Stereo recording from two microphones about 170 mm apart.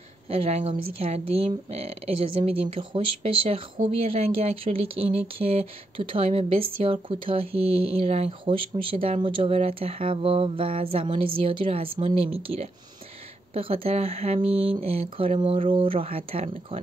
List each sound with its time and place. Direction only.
0.3 s speech: 40° right (ahead or behind)
2.7 s speech: 30° right (ahead or behind)